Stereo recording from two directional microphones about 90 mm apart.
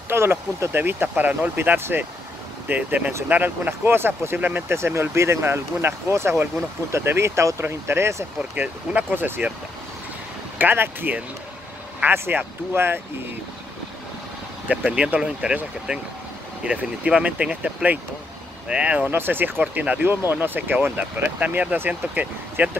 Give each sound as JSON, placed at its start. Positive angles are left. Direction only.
{"t": 0.1, "sound": "speech", "side_deg": -25}
{"t": 8.4, "sound": "speech", "side_deg": -15}
{"t": 10.6, "sound": "speech", "side_deg": -20}
{"t": 14.7, "sound": "speech", "side_deg": -10}